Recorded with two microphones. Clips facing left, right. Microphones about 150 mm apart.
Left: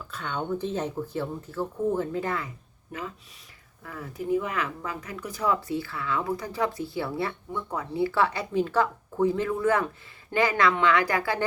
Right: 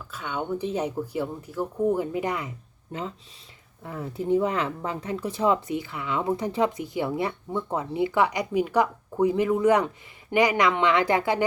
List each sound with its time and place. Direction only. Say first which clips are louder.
0.1 s speech: right 1 dB; 5° right (ahead or behind)